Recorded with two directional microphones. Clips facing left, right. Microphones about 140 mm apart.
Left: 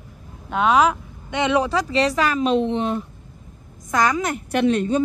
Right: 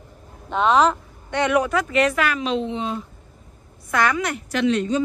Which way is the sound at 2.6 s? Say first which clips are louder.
Left 4 dB; 60° left (ahead or behind).